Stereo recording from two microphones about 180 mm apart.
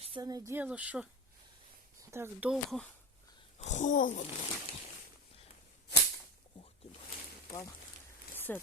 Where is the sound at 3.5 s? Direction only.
40° left (ahead or behind).